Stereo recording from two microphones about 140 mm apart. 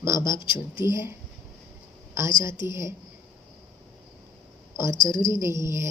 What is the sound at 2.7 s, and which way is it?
Speech, 20° right (ahead or behind).